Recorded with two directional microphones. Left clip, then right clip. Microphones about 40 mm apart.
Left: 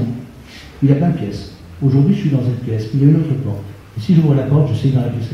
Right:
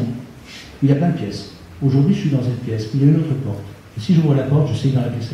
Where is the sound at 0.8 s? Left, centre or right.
Centre.